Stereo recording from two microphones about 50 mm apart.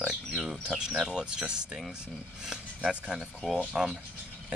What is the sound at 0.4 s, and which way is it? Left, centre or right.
Bird, centre.